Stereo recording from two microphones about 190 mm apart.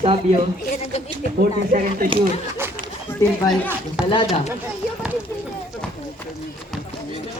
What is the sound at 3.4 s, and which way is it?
Speech, 15° left (ahead or behind).